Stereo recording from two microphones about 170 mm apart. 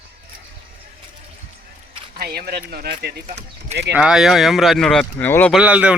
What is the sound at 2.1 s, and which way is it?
Speech, 65° right (ahead or behind).